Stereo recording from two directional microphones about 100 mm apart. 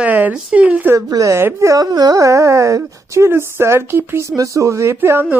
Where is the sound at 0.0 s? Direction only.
15° right (ahead or behind).